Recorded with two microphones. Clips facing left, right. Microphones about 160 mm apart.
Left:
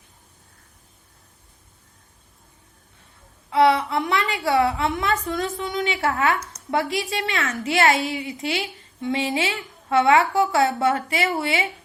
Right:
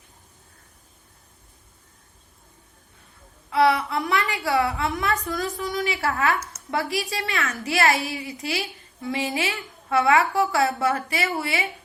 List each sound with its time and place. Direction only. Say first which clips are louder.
3.5 s a woman's voice: left 2 dB; 25° left (ahead or behind)